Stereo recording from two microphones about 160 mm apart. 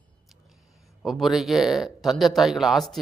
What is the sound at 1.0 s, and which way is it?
Speech, centre (ahead or behind).